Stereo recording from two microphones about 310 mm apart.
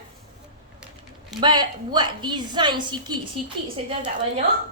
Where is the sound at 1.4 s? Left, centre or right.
Centre.